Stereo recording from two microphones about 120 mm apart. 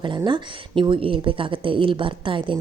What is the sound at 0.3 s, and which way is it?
Speech, 40° right (ahead or behind).